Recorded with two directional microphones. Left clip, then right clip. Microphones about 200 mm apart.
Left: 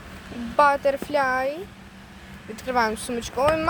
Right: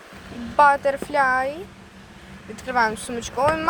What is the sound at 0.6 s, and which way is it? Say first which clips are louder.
Speech: right 2 dB; 15° left (ahead or behind).